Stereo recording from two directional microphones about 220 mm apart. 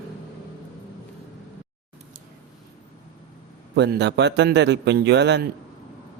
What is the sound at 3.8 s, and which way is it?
Speech, 50° right (ahead or behind).